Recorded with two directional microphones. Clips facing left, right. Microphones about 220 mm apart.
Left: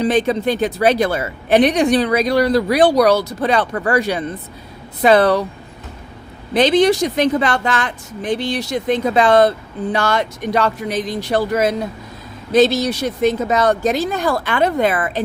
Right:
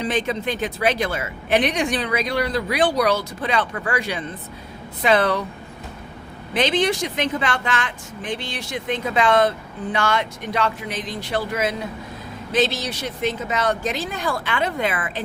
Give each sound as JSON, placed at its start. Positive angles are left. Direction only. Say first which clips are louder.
{"t": 0.0, "sound": "a woman's voice", "louder": "left 7 dB", "side_deg": 35}
{"t": 6.5, "sound": "a woman's voice", "louder": "left 7 dB", "side_deg": 35}